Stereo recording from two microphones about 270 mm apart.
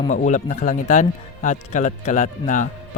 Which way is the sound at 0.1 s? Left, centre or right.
Left.